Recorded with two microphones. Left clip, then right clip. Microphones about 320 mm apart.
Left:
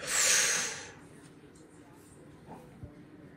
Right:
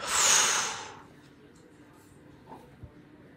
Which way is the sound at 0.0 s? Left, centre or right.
Centre.